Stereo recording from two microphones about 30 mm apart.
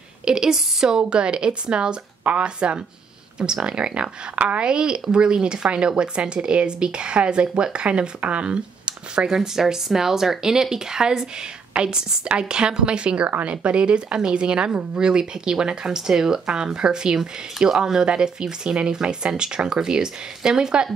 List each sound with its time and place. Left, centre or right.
0.2 s speech: right
0.9 s speech: right
4.6 s speech: right
9.6 s speech: centre; by 13.3 s right
13.4 s speech: right